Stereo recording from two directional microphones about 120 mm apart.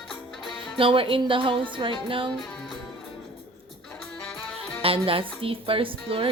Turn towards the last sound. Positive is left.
turn(degrees=-50)  # may be behind; listen again after turning